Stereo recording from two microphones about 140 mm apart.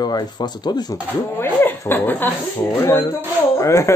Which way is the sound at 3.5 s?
20° left (ahead or behind).